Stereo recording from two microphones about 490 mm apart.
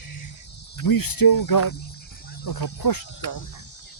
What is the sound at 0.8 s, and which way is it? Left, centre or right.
Speech, left.